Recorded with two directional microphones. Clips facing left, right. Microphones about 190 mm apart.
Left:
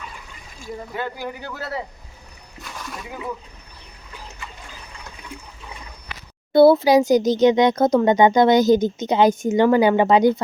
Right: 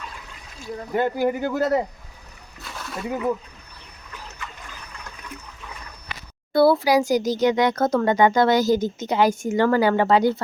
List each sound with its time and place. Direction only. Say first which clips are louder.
0.6 s speech: even; 10° left (ahead or behind)
1.1 s speech: right 9 dB; 50° right (ahead or behind)
5.3 s toilet flush: left 2 dB; 30° left (ahead or behind)
6.5 s speech: left 4 dB; 20° left (ahead or behind)